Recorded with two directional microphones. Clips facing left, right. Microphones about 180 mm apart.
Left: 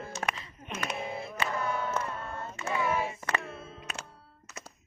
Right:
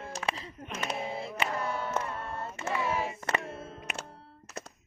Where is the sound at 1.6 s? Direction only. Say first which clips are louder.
Left 1 dB; 30° right (ahead or behind).